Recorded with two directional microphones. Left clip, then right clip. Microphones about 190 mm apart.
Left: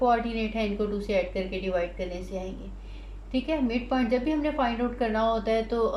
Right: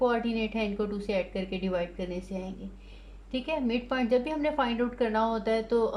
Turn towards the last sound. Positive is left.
turn(degrees=-50)  # may be behind; listen again after turning